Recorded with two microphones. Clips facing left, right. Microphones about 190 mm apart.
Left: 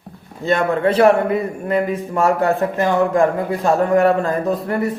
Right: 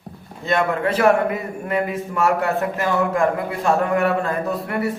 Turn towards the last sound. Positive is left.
turn(degrees=35)  # may be behind; listen again after turning